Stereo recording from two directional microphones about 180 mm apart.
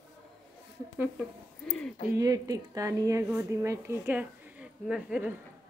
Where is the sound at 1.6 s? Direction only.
5° left (ahead or behind).